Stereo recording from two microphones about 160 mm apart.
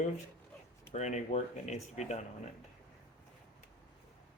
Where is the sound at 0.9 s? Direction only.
45° left (ahead or behind).